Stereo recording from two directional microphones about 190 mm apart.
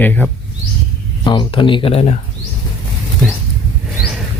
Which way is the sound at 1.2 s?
25° left (ahead or behind).